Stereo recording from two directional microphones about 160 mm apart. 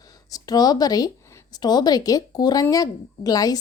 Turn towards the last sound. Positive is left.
turn(degrees=25)  # may be behind; listen again after turning